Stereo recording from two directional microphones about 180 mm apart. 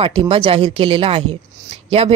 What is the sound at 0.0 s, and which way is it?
A woman's voice, 30° right (ahead or behind).